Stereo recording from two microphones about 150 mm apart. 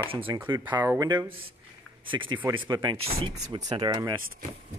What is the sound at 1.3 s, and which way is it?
Speech, 35° right (ahead or behind).